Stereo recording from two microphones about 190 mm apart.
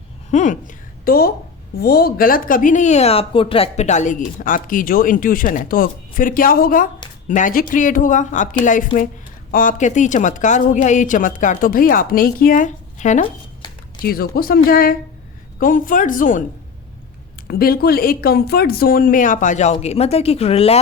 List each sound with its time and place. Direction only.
0.3 s a woman's voice: 40° left (ahead or behind)
14.0 s speech: 55° left (ahead or behind)
17.5 s speech: 50° left (ahead or behind); by 20.7 s 30° left (ahead or behind)